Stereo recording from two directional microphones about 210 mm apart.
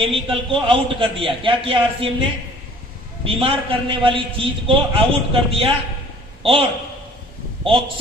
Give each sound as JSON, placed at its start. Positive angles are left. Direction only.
{"t": 0.0, "sound": "a man's voice", "side_deg": -25}
{"t": 3.2, "sound": "a man's voice", "side_deg": -25}